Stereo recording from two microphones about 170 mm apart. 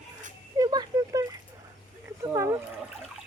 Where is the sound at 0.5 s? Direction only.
20° right (ahead or behind).